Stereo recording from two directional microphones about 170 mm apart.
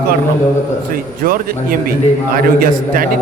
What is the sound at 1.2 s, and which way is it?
A man's voice, 55° right (ahead or behind).